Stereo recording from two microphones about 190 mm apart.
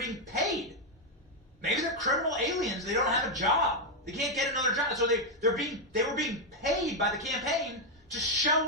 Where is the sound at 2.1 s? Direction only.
Centre (ahead or behind).